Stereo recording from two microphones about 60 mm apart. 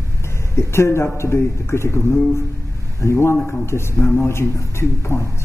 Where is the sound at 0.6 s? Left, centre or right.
Left.